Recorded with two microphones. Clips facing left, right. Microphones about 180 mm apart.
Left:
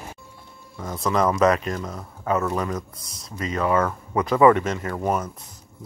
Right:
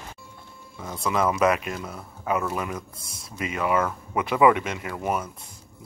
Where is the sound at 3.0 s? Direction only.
25° right (ahead or behind).